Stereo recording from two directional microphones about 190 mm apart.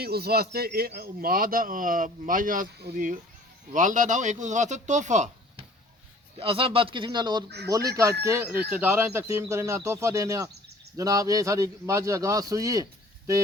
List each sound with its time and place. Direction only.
0.0 s a man's voice: 55° right (ahead or behind); by 13.4 s 15° right (ahead or behind)